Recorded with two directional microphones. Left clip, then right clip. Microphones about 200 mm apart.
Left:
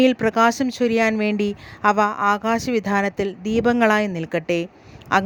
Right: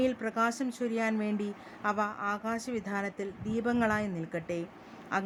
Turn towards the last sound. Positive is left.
turn(degrees=45)  # may be behind; listen again after turning